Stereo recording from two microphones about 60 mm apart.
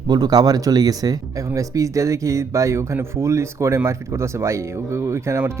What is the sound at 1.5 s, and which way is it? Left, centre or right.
Speech, right.